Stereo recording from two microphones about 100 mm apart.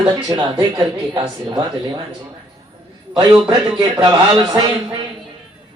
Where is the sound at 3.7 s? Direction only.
45° right (ahead or behind).